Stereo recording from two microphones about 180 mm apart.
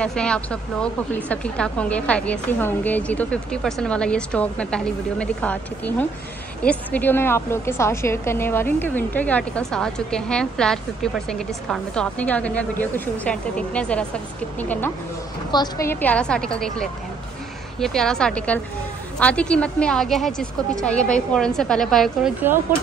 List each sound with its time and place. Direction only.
0.0 s a woman's voice: 5° left (ahead or behind)
15.5 s a woman's voice: 25° left (ahead or behind)
15.9 s a woman's voice: 10° left (ahead or behind)